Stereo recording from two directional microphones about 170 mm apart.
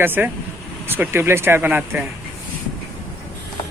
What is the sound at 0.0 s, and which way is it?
Speech, 10° right (ahead or behind).